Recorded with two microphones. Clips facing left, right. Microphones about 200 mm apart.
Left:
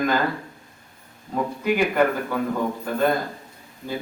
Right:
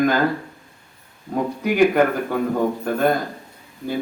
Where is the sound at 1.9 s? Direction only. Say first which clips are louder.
Right 3 dB; 50° right (ahead or behind).